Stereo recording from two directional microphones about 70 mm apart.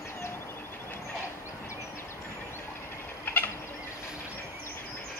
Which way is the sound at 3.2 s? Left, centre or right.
Left.